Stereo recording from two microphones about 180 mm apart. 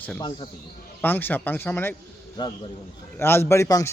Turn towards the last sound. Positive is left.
turn(degrees=15)  # may be behind; listen again after turning